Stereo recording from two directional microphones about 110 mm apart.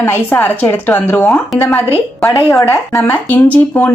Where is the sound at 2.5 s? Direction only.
30° left (ahead or behind).